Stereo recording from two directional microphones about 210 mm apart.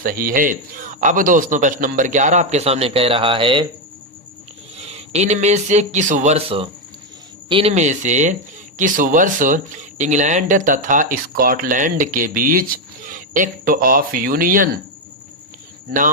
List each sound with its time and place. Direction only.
0.0 s speech: 40° right (ahead or behind); by 3.7 s 25° right (ahead or behind)
4.9 s speech: 30° right (ahead or behind)